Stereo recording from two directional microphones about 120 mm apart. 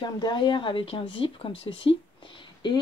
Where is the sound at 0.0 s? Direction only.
40° left (ahead or behind).